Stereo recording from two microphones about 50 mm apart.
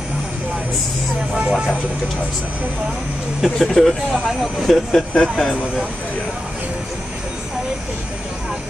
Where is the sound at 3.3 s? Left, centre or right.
Centre.